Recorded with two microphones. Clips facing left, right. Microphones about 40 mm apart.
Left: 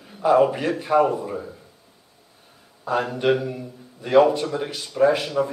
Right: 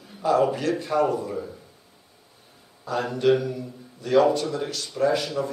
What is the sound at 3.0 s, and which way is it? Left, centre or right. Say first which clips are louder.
A man's voice: right 4 dB; left.